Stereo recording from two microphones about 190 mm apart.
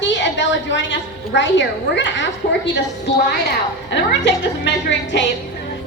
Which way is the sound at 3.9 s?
65° left (ahead or behind).